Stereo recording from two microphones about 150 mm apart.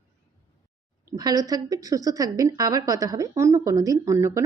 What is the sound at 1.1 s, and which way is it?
A woman's voice, 25° right (ahead or behind).